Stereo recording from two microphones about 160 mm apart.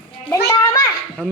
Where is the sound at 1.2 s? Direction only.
10° right (ahead or behind).